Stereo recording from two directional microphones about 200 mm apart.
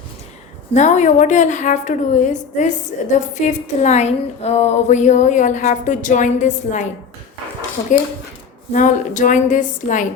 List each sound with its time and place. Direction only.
0.7 s a woman's voice: 35° left (ahead or behind)
8.7 s a woman's voice: 40° left (ahead or behind)